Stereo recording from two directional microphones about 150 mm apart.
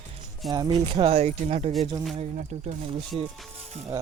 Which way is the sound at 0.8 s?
35° right (ahead or behind).